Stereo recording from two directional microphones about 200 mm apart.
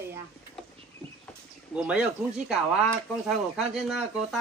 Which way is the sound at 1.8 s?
5° right (ahead or behind).